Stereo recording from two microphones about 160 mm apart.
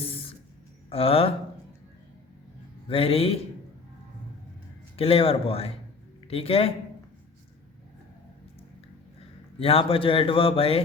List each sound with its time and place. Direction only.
0.9 s a man's voice: 35° left (ahead or behind)
2.9 s a man's voice: 35° left (ahead or behind)
4.9 s a man's voice: 35° left (ahead or behind)
9.6 s a man's voice: 35° left (ahead or behind)